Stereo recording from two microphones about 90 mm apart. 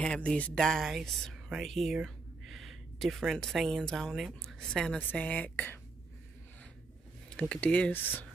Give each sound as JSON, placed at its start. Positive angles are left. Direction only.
{"t": 0.0, "sound": "speech", "side_deg": 10}
{"t": 7.3, "sound": "speech", "side_deg": 10}